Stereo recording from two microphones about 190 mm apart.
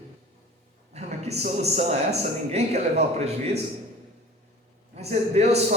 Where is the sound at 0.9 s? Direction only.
35° right (ahead or behind).